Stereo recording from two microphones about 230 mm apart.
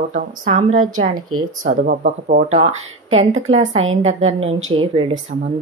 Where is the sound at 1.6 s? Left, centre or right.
Right.